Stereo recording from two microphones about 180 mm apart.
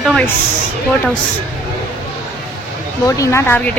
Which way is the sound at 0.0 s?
5° left (ahead or behind).